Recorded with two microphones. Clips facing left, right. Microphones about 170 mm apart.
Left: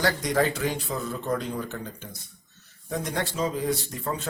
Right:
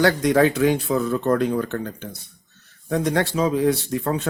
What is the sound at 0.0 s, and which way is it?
Speech, 65° right (ahead or behind).